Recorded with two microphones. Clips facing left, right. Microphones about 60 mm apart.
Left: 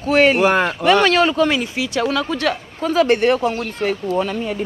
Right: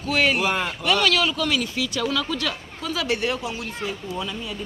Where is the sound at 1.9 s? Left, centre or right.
Left.